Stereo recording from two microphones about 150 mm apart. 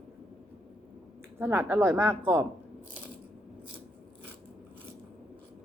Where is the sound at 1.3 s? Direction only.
15° right (ahead or behind).